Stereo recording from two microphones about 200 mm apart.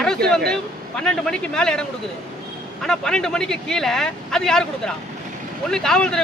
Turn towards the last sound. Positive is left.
turn(degrees=5)  # may be behind; listen again after turning